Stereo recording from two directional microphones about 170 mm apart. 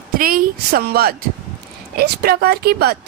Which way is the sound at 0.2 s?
60° right (ahead or behind).